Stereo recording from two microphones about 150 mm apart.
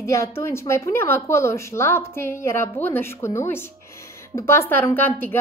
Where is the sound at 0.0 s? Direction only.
20° left (ahead or behind).